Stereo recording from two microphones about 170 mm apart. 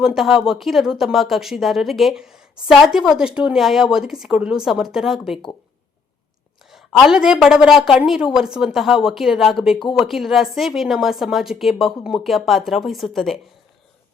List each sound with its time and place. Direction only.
0.0 s speech: 5° right (ahead or behind)
6.7 s speech: centre (ahead or behind)